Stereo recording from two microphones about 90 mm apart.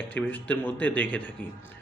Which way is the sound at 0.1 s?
20° left (ahead or behind).